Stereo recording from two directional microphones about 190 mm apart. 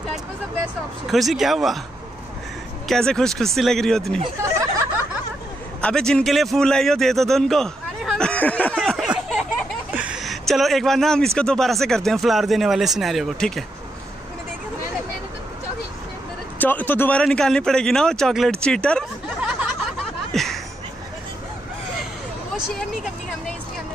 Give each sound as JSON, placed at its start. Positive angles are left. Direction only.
{"t": 1.0, "sound": "speech", "side_deg": 0}
{"t": 2.9, "sound": "speech", "side_deg": 5}
{"t": 4.4, "sound": "a sound", "side_deg": -15}
{"t": 5.8, "sound": "a man's voice", "side_deg": 5}
{"t": 16.5, "sound": "speech", "side_deg": 10}
{"t": 20.3, "sound": "a sound", "side_deg": 0}